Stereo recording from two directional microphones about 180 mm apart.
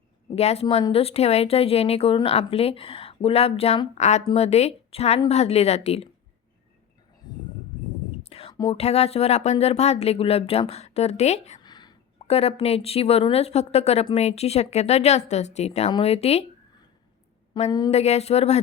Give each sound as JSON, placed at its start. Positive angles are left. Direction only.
{"t": 0.3, "sound": "a woman's voice", "side_deg": 35}
{"t": 8.2, "sound": "whispering", "side_deg": 35}
{"t": 8.8, "sound": "a woman's voice", "side_deg": 35}
{"t": 11.6, "sound": "sneeze", "side_deg": 25}
{"t": 12.3, "sound": "a woman's voice", "side_deg": 35}
{"t": 17.7, "sound": "speech", "side_deg": 25}
{"t": 17.9, "sound": "a woman's voice", "side_deg": 35}